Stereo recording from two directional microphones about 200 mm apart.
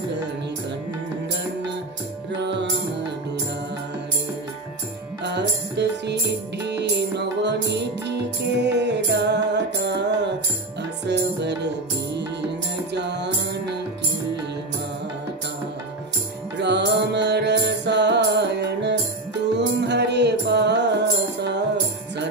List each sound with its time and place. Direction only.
5.2 s music: 60° right (ahead or behind)
16.5 s music: 60° right (ahead or behind)